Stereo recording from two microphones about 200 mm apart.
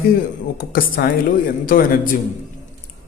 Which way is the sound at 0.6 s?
45° left (ahead or behind).